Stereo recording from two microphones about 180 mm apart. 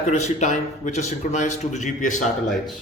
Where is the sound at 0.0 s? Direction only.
40° left (ahead or behind).